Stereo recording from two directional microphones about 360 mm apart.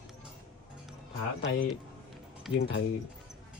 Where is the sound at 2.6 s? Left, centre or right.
Left.